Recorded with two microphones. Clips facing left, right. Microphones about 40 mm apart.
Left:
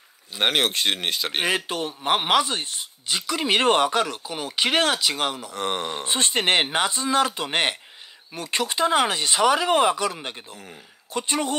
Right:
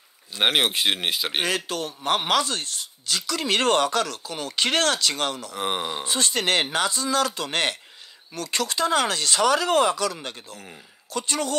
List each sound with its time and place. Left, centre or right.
0.4 s speech: centre
1.4 s speech: left
5.5 s speech: centre
6.0 s speech: left